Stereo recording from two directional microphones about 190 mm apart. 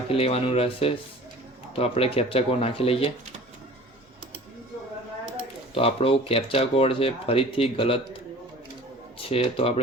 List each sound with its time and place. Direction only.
0.1 s speech: 30° left (ahead or behind)
5.7 s speech: 30° left (ahead or behind)